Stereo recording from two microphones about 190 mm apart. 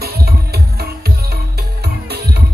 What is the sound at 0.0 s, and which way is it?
Music, 55° right (ahead or behind).